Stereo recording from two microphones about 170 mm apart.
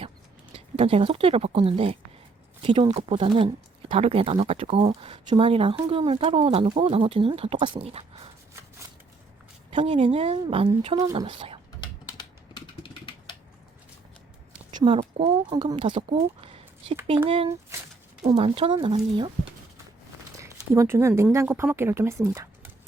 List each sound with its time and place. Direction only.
0.5 s speech: 35° right (ahead or behind)
9.7 s speech: 35° right (ahead or behind)
12.0 s typing: 25° left (ahead or behind)
14.7 s speech: 25° right (ahead or behind)
17.2 s speech: 35° right (ahead or behind)
20.4 s speech: 15° right (ahead or behind)